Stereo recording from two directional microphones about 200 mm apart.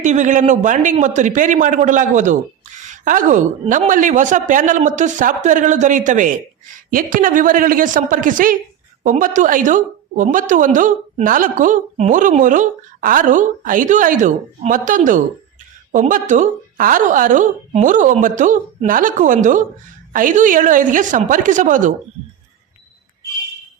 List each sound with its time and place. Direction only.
0.0 s a woman's voice: 40° right (ahead or behind)